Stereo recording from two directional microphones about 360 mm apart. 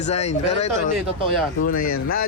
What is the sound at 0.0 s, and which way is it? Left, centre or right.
Speech, centre.